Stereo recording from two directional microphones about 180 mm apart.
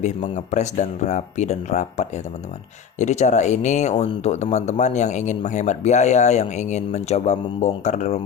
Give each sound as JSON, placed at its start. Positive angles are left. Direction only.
{"t": 0.0, "sound": "speech", "side_deg": 40}